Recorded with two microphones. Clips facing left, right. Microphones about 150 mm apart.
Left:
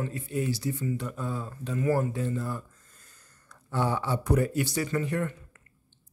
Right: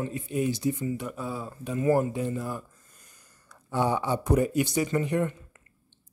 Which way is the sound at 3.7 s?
15° right (ahead or behind).